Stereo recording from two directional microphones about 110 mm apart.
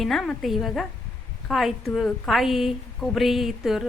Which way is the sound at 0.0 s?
Centre (ahead or behind).